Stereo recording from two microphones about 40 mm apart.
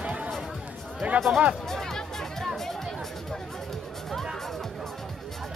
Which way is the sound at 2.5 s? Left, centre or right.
Centre.